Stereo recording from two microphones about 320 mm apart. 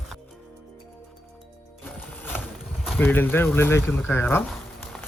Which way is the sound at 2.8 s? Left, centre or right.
Centre.